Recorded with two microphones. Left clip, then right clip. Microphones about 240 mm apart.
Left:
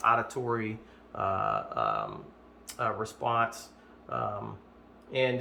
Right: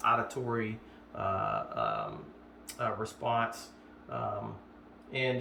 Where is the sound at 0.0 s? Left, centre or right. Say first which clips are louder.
Left 3 dB; centre.